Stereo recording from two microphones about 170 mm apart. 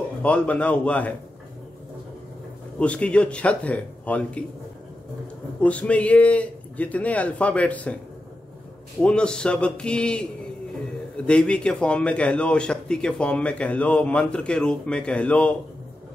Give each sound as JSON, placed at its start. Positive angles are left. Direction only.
{"t": 0.2, "sound": "a man's voice", "side_deg": 10}
{"t": 2.8, "sound": "a man's voice", "side_deg": 5}
{"t": 5.6, "sound": "a man's voice", "side_deg": 10}
{"t": 9.0, "sound": "a man's voice", "side_deg": 5}
{"t": 11.2, "sound": "a man's voice", "side_deg": 5}